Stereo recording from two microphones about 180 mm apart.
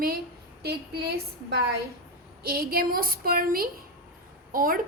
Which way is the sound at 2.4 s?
55° right (ahead or behind).